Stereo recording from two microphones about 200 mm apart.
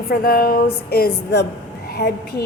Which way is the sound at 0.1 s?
50° left (ahead or behind).